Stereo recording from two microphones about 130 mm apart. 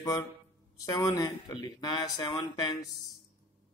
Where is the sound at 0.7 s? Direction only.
30° left (ahead or behind).